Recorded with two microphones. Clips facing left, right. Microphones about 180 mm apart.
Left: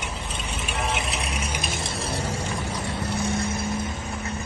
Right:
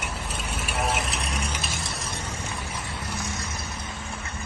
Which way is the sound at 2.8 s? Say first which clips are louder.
Left 7 dB; 60° left (ahead or behind).